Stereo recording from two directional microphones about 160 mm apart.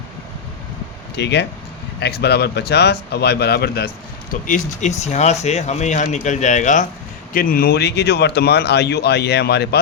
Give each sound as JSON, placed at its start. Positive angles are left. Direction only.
{"t": 1.1, "sound": "speech", "side_deg": 90}
{"t": 4.4, "sound": "speech", "side_deg": 50}
{"t": 7.3, "sound": "speech", "side_deg": 65}